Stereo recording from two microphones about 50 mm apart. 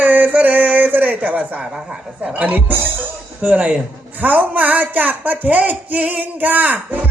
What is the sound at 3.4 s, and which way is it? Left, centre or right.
Speech, right.